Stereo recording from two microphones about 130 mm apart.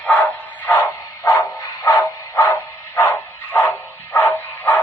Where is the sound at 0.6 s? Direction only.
20° left (ahead or behind).